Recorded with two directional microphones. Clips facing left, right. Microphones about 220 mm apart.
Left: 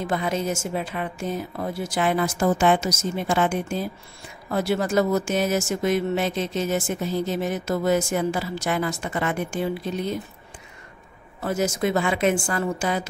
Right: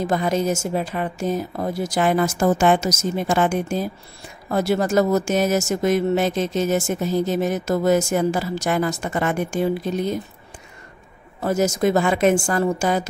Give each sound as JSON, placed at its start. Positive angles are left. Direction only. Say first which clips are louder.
{"t": 0.1, "sound": "speech", "louder": "right 3 dB", "side_deg": -40}
{"t": 11.4, "sound": "speech", "louder": "right 4 dB", "side_deg": -40}